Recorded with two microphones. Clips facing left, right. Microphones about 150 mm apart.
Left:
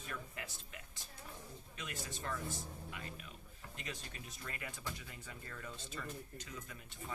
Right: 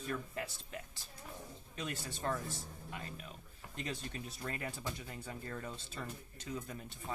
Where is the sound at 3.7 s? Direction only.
35° right (ahead or behind).